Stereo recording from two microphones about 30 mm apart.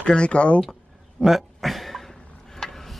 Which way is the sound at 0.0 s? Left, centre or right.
Left.